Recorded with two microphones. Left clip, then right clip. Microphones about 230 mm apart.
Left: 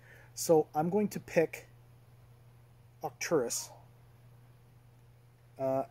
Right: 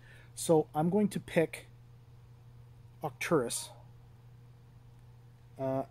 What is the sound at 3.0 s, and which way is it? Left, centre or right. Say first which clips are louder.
Speech: even; centre.